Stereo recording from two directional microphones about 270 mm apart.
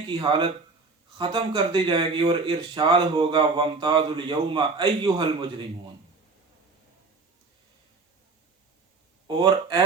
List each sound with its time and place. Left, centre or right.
0.1 s speech: centre
9.2 s speech: centre